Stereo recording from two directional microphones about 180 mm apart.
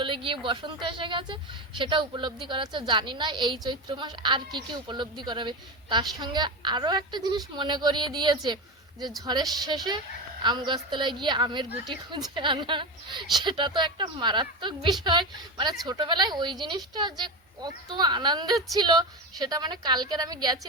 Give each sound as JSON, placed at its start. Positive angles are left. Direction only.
{"t": 0.0, "sound": "a woman's voice", "side_deg": -30}